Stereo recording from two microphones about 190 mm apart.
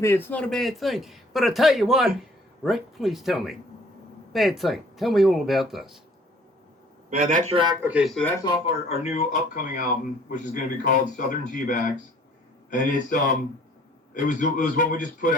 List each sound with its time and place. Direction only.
0.0 s speech: 10° left (ahead or behind)
7.1 s a man's voice: 45° right (ahead or behind)
7.5 s speech: 25° right (ahead or behind)
7.8 s speech: 5° right (ahead or behind)
8.4 s speech: 25° left (ahead or behind); by 15.4 s 45° left (ahead or behind)